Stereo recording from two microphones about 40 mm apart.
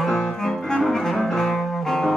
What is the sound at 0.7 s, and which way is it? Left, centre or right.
Bowed string instrument, centre.